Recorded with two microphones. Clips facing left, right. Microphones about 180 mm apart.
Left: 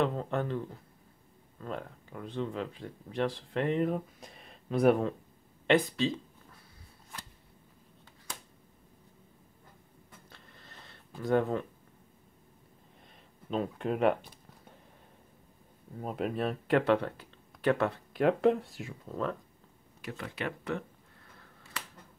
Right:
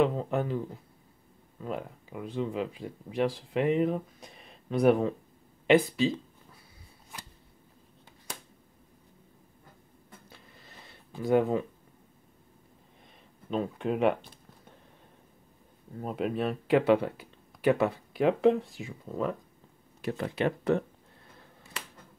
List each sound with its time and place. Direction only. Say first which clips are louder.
0.0 s speech: right 4 dB; 5° right (ahead or behind)
10.3 s a sound: right 1 dB; 5° right (ahead or behind)
13.5 s speech: right 2 dB; centre (ahead or behind)
16.0 s speech: right 2 dB; centre (ahead or behind)
20.0 s speech: right 8 dB; 30° right (ahead or behind)